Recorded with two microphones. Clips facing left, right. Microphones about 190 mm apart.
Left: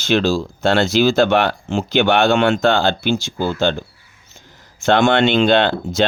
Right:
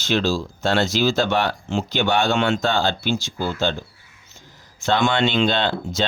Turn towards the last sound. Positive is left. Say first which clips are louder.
# left 6 dB
turn(degrees=60)  # may be behind; listen again after turning